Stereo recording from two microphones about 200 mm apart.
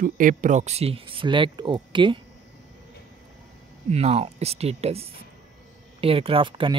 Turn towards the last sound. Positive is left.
turn(degrees=-25)  # may be behind; listen again after turning